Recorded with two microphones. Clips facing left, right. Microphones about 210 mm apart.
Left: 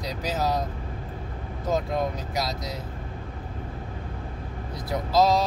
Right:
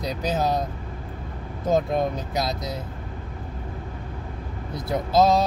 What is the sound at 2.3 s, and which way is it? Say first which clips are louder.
Speech: right 3 dB; 25° right (ahead or behind).